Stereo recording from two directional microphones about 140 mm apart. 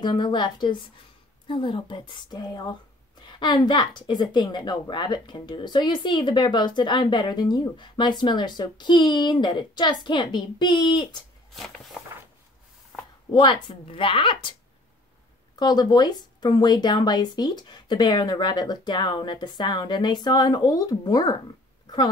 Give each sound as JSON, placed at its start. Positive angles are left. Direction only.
{"t": 0.0, "sound": "a woman's voice", "side_deg": 35}
{"t": 11.5, "sound": "walk", "side_deg": 0}
{"t": 13.3, "sound": "a woman's voice", "side_deg": 30}
{"t": 15.6, "sound": "a woman's voice", "side_deg": 30}
{"t": 21.8, "sound": "a sound", "side_deg": 30}